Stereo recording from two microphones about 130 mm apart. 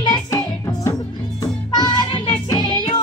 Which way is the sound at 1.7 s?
35° left (ahead or behind).